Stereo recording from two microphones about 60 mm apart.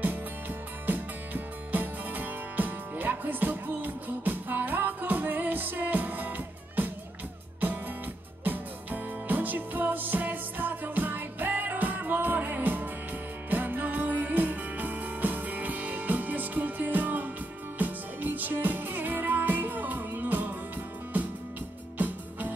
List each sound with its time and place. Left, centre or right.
0.0 s music: right
8.5 s music: right
21.9 s music: right